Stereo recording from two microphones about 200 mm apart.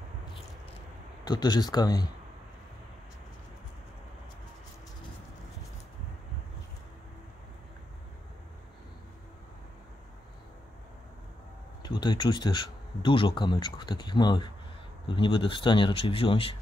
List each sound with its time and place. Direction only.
1.2 s speech: 20° left (ahead or behind)
11.8 s speech: 20° left (ahead or behind)